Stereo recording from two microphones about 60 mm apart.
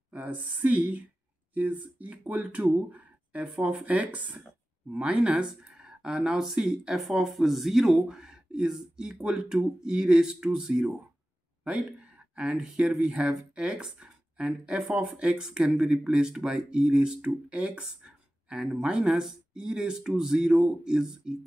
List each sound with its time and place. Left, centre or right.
0.1 s a woman's voice: right; by 21.4 s centre